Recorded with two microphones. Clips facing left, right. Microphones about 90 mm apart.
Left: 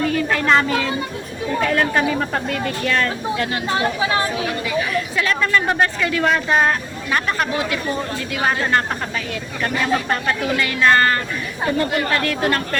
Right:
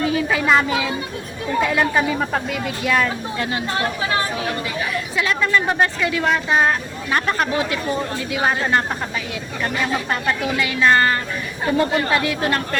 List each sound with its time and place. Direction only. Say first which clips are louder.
0.0 s a sound: even; 5° right (ahead or behind)
1.6 s a woman's voice: left 1 dB; 5° right (ahead or behind)
3.3 s speech: left 1 dB; 20° right (ahead or behind)
5.1 s speech: right 1 dB; 15° right (ahead or behind)
7.1 s speech: right 1 dB; 30° right (ahead or behind)